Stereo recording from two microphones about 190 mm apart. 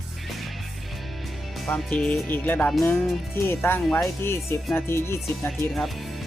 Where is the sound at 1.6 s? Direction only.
5° left (ahead or behind).